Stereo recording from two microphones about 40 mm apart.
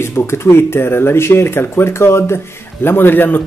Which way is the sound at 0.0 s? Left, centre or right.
Left.